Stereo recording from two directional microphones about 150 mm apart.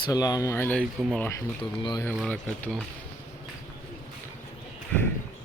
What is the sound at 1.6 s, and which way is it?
Speech, 30° left (ahead or behind).